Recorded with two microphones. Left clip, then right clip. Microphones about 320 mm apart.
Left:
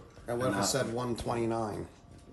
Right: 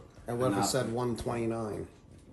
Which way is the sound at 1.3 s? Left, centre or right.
Centre.